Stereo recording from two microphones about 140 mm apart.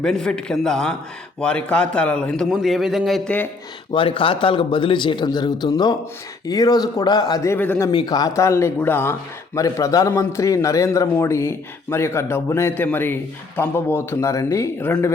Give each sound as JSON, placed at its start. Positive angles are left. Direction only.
{"t": 0.0, "sound": "a man's voice", "side_deg": 5}
{"t": 3.9, "sound": "a man's voice", "side_deg": 40}
{"t": 7.5, "sound": "speech", "side_deg": 10}
{"t": 7.8, "sound": "a man's voice", "side_deg": 30}